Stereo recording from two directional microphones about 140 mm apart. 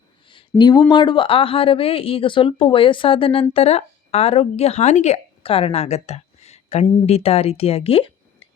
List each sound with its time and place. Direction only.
0.6 s speech: 30° left (ahead or behind)